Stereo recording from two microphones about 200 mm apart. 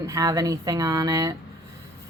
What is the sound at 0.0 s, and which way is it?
A woman's voice, 15° right (ahead or behind).